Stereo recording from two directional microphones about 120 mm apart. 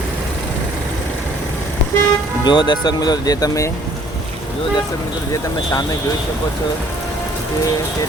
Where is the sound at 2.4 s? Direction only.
35° left (ahead or behind).